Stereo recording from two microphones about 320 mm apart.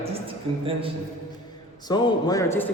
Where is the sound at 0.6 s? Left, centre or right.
Centre.